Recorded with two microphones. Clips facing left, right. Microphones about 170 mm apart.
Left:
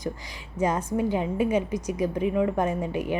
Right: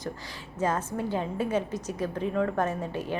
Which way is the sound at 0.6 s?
15° left (ahead or behind).